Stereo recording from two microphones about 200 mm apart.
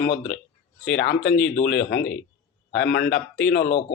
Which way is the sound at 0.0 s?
60° left (ahead or behind).